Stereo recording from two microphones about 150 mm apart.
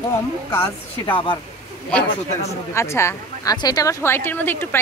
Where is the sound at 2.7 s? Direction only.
20° left (ahead or behind).